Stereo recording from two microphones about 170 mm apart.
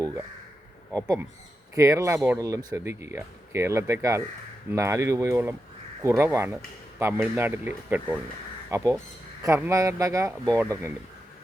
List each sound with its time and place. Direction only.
1.0 s speech: 20° right (ahead or behind)